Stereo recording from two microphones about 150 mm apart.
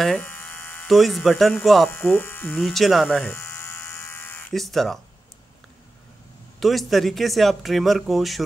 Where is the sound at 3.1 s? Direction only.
15° left (ahead or behind).